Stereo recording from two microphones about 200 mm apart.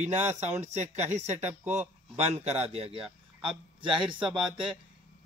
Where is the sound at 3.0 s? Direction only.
5° right (ahead or behind).